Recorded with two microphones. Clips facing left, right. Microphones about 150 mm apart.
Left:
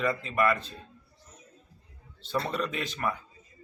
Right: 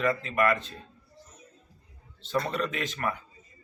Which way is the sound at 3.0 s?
Centre (ahead or behind).